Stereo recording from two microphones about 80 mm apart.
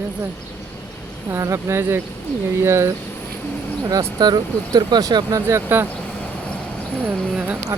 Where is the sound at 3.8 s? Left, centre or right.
Right.